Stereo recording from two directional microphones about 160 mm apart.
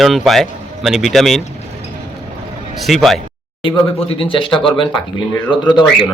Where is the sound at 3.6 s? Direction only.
35° left (ahead or behind).